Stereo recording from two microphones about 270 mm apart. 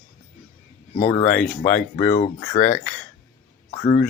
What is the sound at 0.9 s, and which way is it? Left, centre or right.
Speech, left.